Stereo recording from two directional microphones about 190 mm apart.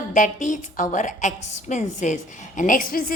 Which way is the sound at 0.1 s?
45° left (ahead or behind).